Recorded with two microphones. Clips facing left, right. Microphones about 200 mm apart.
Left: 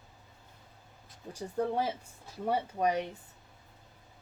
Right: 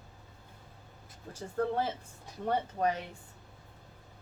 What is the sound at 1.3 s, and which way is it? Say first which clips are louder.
Speech: even; 15° left (ahead or behind).